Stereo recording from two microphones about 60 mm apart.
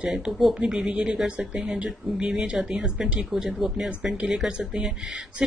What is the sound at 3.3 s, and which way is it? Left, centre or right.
A woman's voice, centre.